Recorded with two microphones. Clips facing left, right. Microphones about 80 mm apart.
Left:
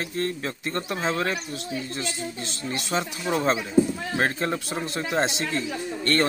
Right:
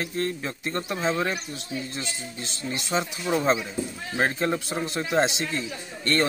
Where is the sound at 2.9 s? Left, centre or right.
Centre.